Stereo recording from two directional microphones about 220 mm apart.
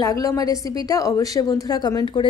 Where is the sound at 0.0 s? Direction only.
15° left (ahead or behind).